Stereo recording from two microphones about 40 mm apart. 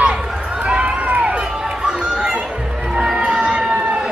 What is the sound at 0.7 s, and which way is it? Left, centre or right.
Run, right.